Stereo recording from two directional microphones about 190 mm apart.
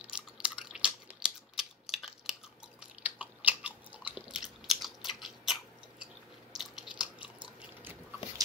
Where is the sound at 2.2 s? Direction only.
5° right (ahead or behind).